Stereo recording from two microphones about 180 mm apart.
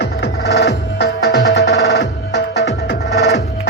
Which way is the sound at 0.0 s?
65° left (ahead or behind).